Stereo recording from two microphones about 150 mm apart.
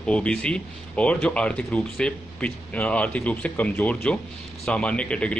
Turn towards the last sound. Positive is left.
turn(degrees=10)  # may be behind; listen again after turning